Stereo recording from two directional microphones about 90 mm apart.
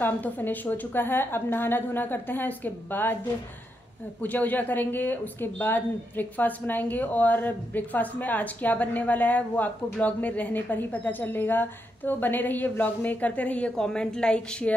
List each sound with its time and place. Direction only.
0.0 s speech: 20° left (ahead or behind)
4.2 s speech: 20° left (ahead or behind)